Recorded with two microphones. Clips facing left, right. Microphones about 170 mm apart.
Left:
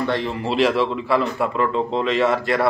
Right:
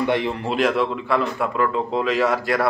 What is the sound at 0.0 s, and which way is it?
Speech, 15° right (ahead or behind).